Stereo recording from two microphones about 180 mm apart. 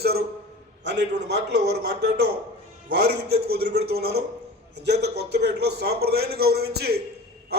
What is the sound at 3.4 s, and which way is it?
A man's voice, 60° right (ahead or behind).